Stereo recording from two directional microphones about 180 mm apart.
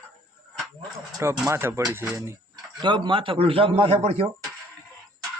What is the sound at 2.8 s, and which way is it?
A man's voice, 25° right (ahead or behind).